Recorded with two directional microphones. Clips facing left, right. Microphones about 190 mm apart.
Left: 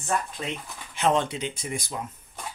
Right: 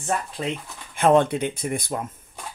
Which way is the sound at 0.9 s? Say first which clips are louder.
Right 6 dB; 55° right (ahead or behind).